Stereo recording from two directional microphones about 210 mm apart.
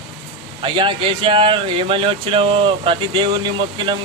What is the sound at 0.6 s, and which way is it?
Speech, 25° right (ahead or behind).